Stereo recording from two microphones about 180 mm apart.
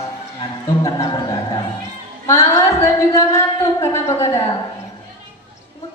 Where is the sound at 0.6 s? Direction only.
20° left (ahead or behind).